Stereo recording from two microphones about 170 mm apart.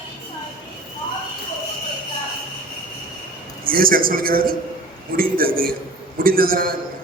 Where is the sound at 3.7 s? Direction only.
55° right (ahead or behind).